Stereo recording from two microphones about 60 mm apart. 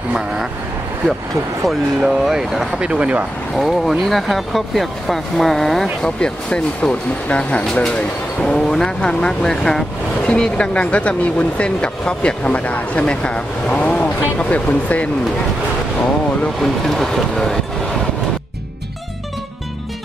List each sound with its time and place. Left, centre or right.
1.7 s speech: centre
3.5 s speech: centre; by 15.0 s left
16.6 s speech: centre